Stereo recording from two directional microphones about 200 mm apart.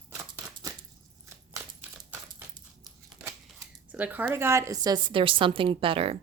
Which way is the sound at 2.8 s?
5° right (ahead or behind).